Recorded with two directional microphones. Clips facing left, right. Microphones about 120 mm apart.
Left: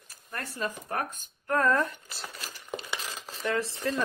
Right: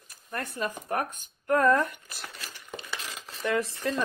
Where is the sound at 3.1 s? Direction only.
30° left (ahead or behind).